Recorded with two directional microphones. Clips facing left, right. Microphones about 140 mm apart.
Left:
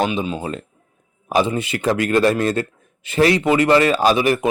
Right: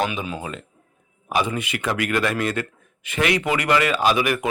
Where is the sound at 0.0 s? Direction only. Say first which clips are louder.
Left 4 dB; 25° left (ahead or behind).